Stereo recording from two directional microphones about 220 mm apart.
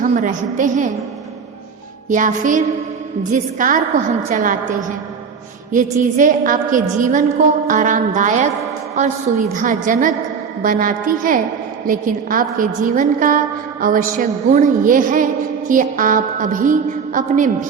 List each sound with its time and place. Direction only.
0.0 s a woman's voice: 35° right (ahead or behind)
2.0 s a woman's voice: 35° right (ahead or behind)
5.7 s a woman's voice: 35° right (ahead or behind)
9.5 s a woman's voice: 35° right (ahead or behind)